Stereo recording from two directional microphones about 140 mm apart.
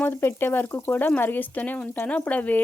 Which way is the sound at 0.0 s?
15° left (ahead or behind).